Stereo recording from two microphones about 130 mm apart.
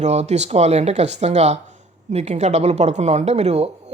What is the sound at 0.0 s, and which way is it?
Speech, 60° right (ahead or behind).